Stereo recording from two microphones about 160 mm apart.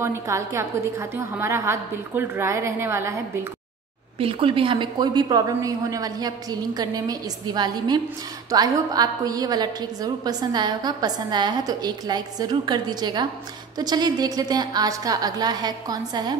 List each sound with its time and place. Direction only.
0.0 s a woman's voice: 15° right (ahead or behind)
4.2 s a woman's voice: 35° right (ahead or behind)